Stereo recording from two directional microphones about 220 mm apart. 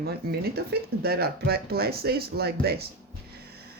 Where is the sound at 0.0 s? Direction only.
45° right (ahead or behind).